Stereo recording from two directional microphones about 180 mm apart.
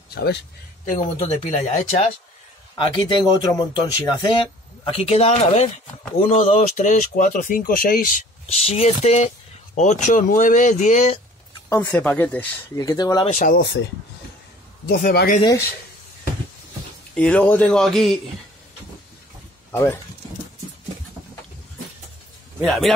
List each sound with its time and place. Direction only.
0.1 s speech: 65° left (ahead or behind)
0.8 s speech: 40° left (ahead or behind)
2.8 s speech: 25° left (ahead or behind); by 8.2 s 50° left (ahead or behind)
8.5 s speech: 35° left (ahead or behind)
11.7 s a man's voice: 15° left (ahead or behind)
12.7 s speech: 20° left (ahead or behind)
13.3 s speech: 45° left (ahead or behind)
14.9 s speech: 55° left (ahead or behind)
17.1 s a man's voice: 5° left (ahead or behind)
19.7 s speech: 10° left (ahead or behind)
22.6 s a man's voice: centre (ahead or behind)